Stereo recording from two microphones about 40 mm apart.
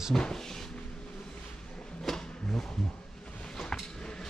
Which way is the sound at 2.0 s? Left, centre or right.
Centre.